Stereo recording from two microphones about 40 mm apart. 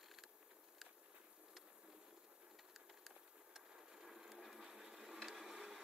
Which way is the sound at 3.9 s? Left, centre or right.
Centre.